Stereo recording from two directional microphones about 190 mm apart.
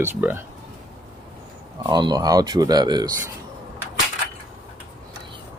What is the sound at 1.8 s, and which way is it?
Speech, 20° right (ahead or behind).